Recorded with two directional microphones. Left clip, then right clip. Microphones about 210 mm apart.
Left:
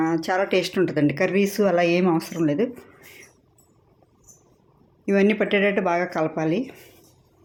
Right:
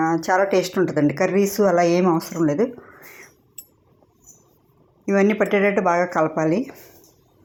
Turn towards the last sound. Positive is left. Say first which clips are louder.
# right 3 dB
turn(degrees=-5)  # may be behind; listen again after turning